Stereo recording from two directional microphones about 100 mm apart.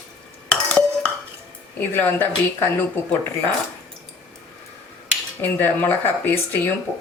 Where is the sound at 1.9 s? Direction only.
20° left (ahead or behind).